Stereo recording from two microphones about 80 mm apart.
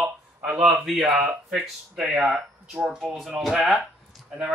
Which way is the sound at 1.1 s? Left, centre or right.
Centre.